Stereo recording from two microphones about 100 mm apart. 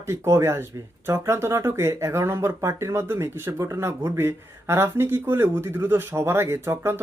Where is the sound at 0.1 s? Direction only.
25° right (ahead or behind).